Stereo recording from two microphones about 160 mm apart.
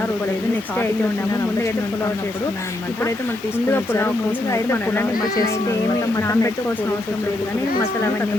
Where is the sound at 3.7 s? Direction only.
15° left (ahead or behind).